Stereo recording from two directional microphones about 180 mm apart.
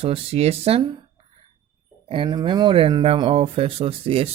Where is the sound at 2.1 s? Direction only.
25° right (ahead or behind).